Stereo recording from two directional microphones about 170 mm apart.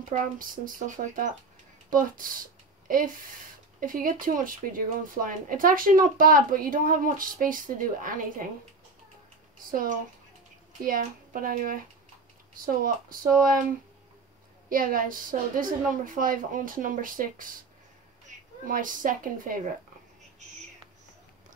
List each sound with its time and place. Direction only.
0.1 s a woman's voice: 50° right (ahead or behind)
9.7 s a woman's voice: 55° right (ahead or behind)
14.7 s a woman's voice: 55° right (ahead or behind)
18.3 s a sound: 45° right (ahead or behind)
18.7 s a woman's voice: 50° right (ahead or behind)